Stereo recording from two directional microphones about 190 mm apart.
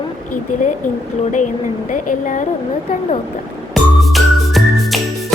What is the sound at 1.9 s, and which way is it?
Speech, 40° left (ahead or behind).